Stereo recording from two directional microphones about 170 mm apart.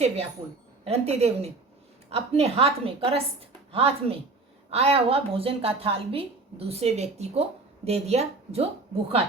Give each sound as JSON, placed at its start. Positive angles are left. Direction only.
{"t": 0.9, "sound": "a woman's voice", "side_deg": -40}